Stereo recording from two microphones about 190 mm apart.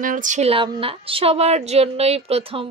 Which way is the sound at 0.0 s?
45° right (ahead or behind).